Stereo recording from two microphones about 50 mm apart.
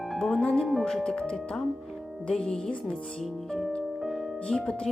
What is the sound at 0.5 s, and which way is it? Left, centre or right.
Music, centre.